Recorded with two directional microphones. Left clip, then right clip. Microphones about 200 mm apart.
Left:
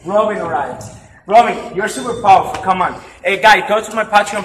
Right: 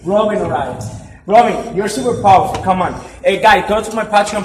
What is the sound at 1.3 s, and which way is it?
A man's voice, centre (ahead or behind).